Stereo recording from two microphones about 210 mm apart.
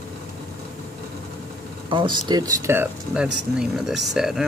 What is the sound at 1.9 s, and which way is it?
Speech, 20° right (ahead or behind).